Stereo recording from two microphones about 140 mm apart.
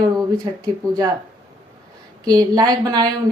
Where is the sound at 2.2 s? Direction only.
25° right (ahead or behind).